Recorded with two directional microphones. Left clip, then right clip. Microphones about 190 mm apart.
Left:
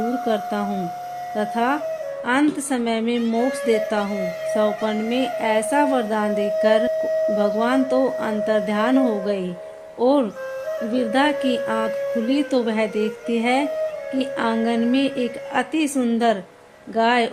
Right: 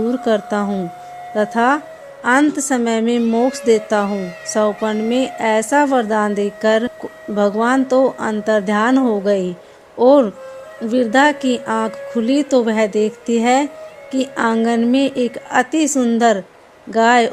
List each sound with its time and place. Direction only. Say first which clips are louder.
0.3 s speech: right 5 dB; 40° right (ahead or behind)